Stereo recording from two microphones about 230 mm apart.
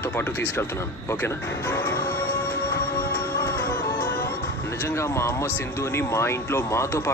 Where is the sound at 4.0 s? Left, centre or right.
Left.